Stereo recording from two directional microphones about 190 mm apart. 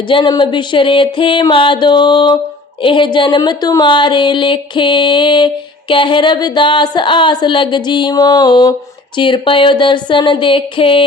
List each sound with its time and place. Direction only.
0.1 s a woman's voice: 25° left (ahead or behind)